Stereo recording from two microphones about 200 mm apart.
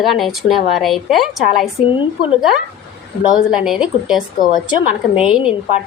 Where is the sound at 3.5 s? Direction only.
5° right (ahead or behind).